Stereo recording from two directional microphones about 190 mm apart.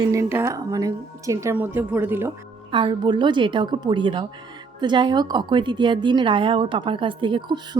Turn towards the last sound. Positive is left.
turn(degrees=-25)  # may be behind; listen again after turning